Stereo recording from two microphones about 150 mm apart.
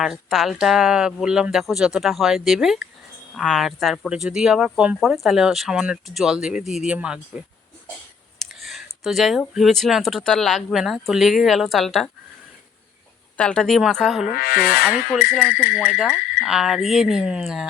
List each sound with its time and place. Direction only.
0.0 s speech: centre (ahead or behind)
13.3 s speech: 5° left (ahead or behind)
14.3 s speech: 85° left
15.4 s speech: 10° right (ahead or behind)